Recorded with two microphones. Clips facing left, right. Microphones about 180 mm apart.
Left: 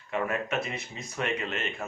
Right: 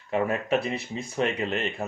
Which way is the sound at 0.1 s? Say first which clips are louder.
Right 5 dB; 35° right (ahead or behind).